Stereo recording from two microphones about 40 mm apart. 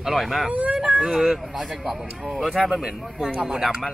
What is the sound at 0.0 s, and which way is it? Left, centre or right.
Speech, centre.